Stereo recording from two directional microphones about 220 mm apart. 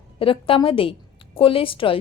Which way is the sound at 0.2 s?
25° left (ahead or behind).